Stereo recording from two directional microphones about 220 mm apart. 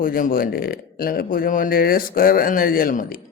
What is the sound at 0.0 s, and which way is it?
Speech, 40° left (ahead or behind).